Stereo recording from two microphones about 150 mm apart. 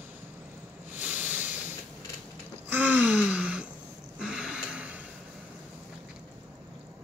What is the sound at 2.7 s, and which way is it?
Gasp, 10° right (ahead or behind).